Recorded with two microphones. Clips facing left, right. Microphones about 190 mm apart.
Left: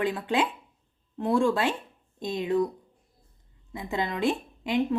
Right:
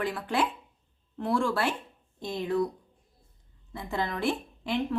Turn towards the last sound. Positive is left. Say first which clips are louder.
# left 4 dB
turn(degrees=15)  # may be behind; listen again after turning